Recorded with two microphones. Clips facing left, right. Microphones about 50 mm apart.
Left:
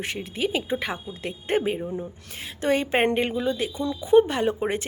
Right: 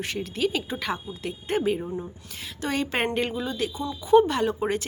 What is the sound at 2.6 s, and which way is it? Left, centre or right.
A woman's voice, left.